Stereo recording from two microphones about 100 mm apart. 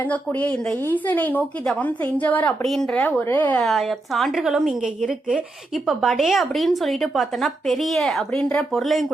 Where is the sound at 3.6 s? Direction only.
Centre (ahead or behind).